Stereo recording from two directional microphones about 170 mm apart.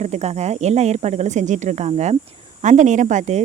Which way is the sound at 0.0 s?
40° right (ahead or behind).